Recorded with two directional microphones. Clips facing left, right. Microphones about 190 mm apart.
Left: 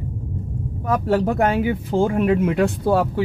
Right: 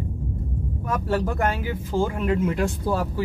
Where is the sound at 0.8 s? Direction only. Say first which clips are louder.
Left 6 dB; 55° left (ahead or behind).